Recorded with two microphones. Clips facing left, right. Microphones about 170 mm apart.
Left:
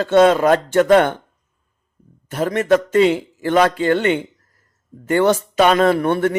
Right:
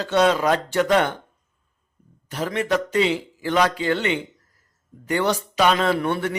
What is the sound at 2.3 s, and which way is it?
Speech, 50° left (ahead or behind).